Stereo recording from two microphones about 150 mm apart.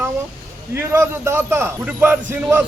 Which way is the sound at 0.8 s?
15° right (ahead or behind).